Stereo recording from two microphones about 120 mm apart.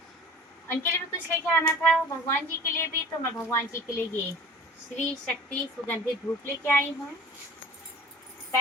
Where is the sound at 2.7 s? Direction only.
20° left (ahead or behind).